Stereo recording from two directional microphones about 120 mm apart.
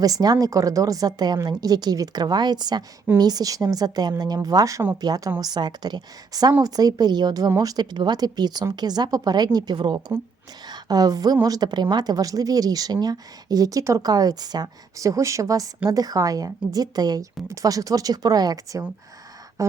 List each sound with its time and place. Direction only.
0.0 s a woman's voice: 30° right (ahead or behind)